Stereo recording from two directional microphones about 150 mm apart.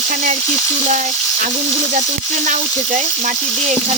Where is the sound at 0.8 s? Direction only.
55° right (ahead or behind).